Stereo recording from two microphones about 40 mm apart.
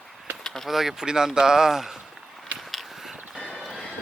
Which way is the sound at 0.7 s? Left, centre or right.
Centre.